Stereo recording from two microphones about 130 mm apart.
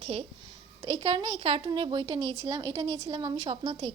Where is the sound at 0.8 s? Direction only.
35° right (ahead or behind).